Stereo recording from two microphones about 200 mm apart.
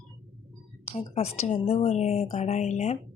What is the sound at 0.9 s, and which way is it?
Speech, 30° left (ahead or behind).